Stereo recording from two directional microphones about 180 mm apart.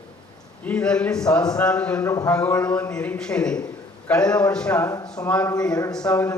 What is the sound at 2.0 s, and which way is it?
Speech, 20° left (ahead or behind).